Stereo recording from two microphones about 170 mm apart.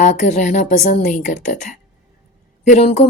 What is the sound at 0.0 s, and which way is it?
Speech, 45° left (ahead or behind).